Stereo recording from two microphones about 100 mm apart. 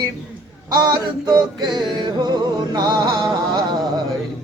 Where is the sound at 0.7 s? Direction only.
45° right (ahead or behind).